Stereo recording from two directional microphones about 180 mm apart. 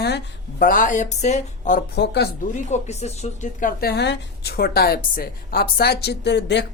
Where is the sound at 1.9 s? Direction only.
70° left (ahead or behind).